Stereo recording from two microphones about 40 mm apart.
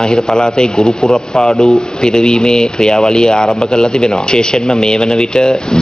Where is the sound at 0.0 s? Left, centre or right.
Centre.